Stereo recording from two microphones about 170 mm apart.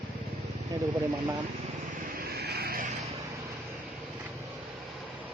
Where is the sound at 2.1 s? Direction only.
65° right (ahead or behind).